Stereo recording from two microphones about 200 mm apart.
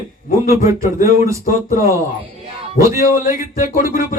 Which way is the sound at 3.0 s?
40° left (ahead or behind).